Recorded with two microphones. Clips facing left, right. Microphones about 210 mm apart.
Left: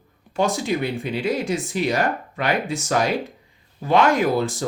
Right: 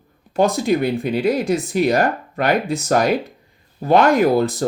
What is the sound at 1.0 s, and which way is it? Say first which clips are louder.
Speech: right 5 dB; 55° right (ahead or behind).